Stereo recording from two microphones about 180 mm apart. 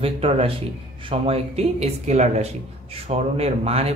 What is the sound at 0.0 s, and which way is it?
Speech, 35° right (ahead or behind).